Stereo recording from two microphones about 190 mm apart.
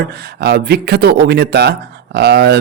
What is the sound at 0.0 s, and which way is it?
Speech, 55° right (ahead or behind).